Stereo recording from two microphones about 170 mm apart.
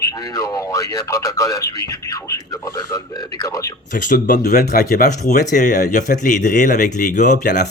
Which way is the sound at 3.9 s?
50° left (ahead or behind).